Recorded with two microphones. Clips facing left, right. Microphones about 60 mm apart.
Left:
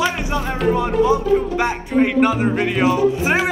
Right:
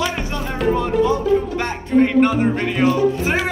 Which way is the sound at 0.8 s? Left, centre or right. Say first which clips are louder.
Left 2 dB; centre.